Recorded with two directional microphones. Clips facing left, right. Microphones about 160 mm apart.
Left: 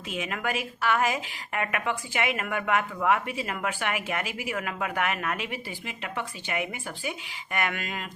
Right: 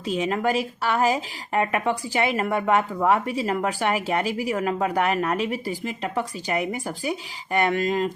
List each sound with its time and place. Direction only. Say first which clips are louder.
0.1 s a woman's voice: right 8 dB; 35° right (ahead or behind)